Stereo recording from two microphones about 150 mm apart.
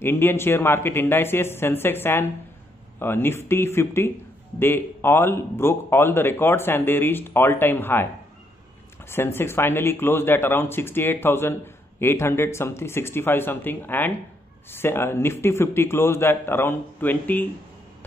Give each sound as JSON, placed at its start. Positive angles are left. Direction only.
{"t": 0.0, "sound": "speech", "side_deg": 15}
{"t": 9.1, "sound": "speech", "side_deg": 15}